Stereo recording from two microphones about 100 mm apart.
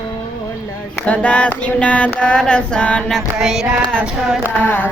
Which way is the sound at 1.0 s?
15° left (ahead or behind).